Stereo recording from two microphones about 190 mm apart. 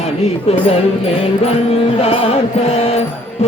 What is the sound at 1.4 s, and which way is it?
Mantra, 30° left (ahead or behind).